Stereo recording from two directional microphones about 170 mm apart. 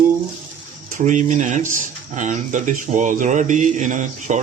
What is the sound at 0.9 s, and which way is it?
Speech, 45° right (ahead or behind).